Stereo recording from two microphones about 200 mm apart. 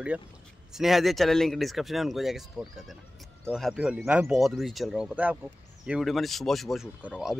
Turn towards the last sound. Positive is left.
turn(degrees=-5)  # may be behind; listen again after turning